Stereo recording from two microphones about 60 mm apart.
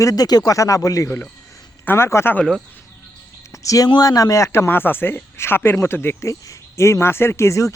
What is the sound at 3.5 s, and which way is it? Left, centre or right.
A man's voice, left.